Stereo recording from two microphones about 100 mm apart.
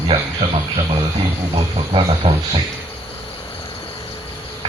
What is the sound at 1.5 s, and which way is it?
Speech, 65° right (ahead or behind).